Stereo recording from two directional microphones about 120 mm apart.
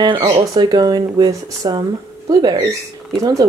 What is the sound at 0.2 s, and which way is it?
Speech, 35° right (ahead or behind).